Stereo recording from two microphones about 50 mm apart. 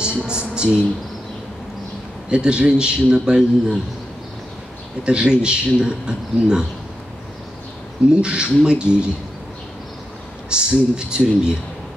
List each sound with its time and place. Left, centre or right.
0.0 s a sound: centre
2.3 s a man's voice: right
5.0 s a man's voice: centre
8.1 s a man's voice: centre
10.5 s a man's voice: centre